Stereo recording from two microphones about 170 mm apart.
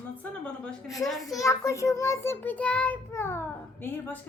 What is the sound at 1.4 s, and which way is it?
A child's voice, 20° left (ahead or behind).